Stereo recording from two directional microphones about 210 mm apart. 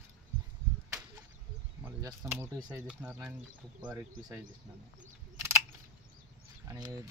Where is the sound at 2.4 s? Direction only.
10° right (ahead or behind).